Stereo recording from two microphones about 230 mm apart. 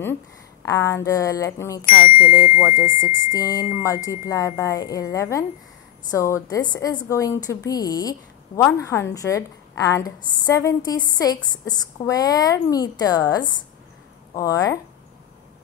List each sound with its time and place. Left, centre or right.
0.7 s a woman's voice: centre
2.5 s speech: left
3.3 s a woman's voice: centre